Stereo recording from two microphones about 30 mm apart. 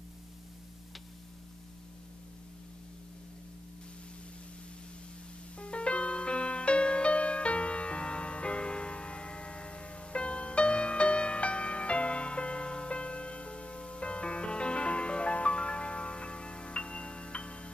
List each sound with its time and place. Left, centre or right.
5.6 s music: left